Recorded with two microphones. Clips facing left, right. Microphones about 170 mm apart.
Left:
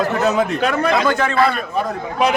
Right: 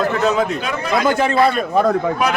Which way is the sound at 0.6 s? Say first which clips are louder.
Left 6 dB; 60° left (ahead or behind).